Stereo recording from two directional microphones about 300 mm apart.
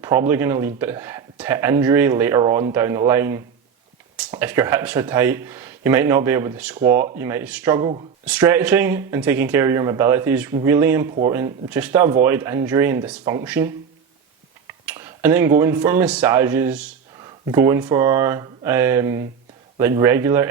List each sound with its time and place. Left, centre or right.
0.0 s speech: centre